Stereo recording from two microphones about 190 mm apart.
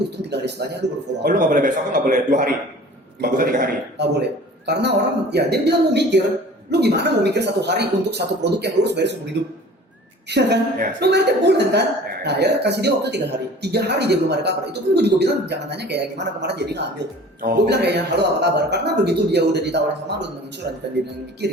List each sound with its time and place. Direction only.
0.3 s speech: 65° right (ahead or behind)
1.2 s a man's voice: 45° right (ahead or behind); by 20.3 s 65° right (ahead or behind)